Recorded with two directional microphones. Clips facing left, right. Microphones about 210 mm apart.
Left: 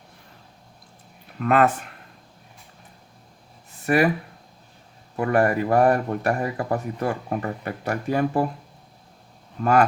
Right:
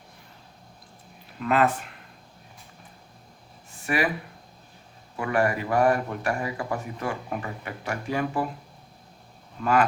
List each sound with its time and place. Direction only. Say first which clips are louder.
1.4 s speech: left 3 dB; 50° left (ahead or behind)
3.8 s speech: left 6 dB; 45° left (ahead or behind)
5.1 s speech: left 5 dB; 45° left (ahead or behind)